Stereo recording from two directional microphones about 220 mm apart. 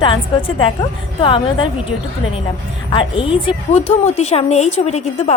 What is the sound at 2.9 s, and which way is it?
A woman's voice, 25° left (ahead or behind).